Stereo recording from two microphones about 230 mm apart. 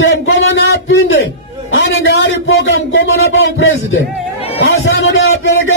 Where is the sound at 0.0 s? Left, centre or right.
Left.